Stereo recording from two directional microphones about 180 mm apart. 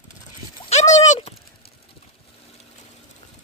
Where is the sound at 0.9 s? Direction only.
40° left (ahead or behind).